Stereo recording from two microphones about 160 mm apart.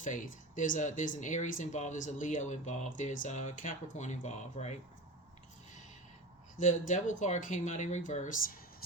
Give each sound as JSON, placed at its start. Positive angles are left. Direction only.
{"t": 0.0, "sound": "speech", "side_deg": 55}
{"t": 6.6, "sound": "speech", "side_deg": 50}